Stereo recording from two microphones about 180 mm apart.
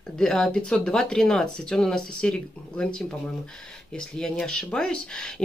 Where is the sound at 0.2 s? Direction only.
5° left (ahead or behind).